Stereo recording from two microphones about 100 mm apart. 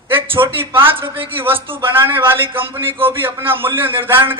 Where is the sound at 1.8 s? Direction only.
20° right (ahead or behind).